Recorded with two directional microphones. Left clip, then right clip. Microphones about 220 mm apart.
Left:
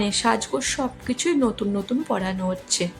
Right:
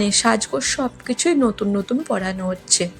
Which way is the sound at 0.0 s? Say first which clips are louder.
Right 4 dB; 20° right (ahead or behind).